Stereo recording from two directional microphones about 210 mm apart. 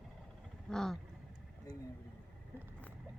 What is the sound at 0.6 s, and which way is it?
Vehicle, centre (ahead or behind).